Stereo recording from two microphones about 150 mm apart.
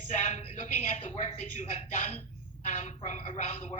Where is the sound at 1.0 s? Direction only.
50° left (ahead or behind).